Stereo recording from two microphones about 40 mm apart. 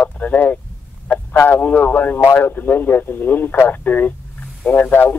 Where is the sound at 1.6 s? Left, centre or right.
Left.